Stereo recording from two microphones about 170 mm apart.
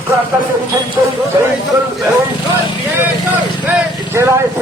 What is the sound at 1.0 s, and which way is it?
Speech, 15° right (ahead or behind).